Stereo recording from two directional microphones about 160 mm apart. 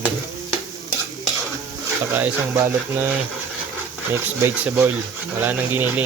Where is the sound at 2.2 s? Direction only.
15° right (ahead or behind).